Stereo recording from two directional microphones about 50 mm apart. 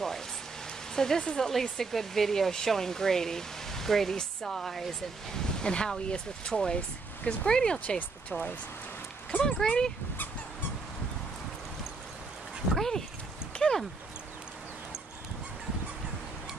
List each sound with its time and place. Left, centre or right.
0.9 s speech: centre
5.6 s speech: centre
7.8 s speech: left
9.4 s speech: centre
12.7 s a sound: centre